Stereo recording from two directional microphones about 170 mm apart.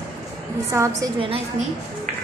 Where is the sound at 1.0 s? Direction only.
30° right (ahead or behind).